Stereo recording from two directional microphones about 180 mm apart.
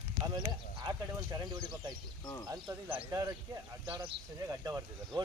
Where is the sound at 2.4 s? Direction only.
20° right (ahead or behind).